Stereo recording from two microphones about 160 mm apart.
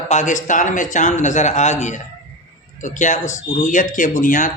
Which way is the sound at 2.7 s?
50° left (ahead or behind).